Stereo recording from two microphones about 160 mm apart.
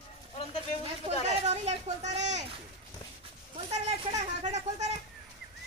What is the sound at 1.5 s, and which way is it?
Speech, 45° right (ahead or behind).